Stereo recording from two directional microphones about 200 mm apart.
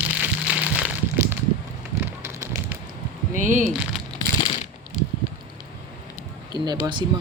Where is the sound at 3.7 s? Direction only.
5° right (ahead or behind).